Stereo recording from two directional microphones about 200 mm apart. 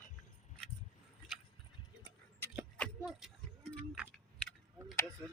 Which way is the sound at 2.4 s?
10° left (ahead or behind).